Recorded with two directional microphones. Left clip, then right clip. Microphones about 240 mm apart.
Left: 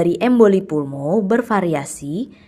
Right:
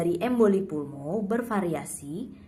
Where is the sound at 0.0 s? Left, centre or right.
Left.